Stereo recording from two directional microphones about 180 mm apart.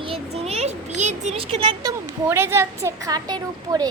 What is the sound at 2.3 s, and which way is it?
A woman's voice, 15° right (ahead or behind).